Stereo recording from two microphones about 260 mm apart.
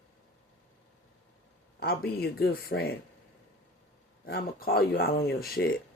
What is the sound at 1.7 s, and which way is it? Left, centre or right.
Speech, left.